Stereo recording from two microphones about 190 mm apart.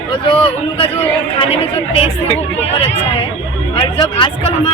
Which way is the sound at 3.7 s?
25° left (ahead or behind).